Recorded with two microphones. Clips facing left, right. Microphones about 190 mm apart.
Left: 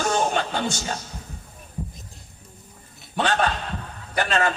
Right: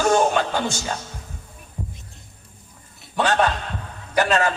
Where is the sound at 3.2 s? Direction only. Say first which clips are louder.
Right 3 dB; 40° right (ahead or behind).